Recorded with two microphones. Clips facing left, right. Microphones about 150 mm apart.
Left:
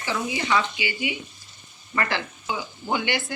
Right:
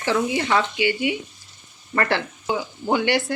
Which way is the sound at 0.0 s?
60° right (ahead or behind).